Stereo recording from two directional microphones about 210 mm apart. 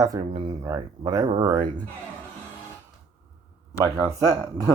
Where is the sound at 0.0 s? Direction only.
20° right (ahead or behind).